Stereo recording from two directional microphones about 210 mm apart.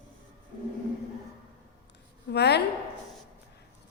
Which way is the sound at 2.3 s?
55° left (ahead or behind).